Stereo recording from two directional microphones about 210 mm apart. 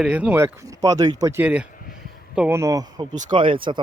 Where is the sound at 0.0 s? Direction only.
5° right (ahead or behind).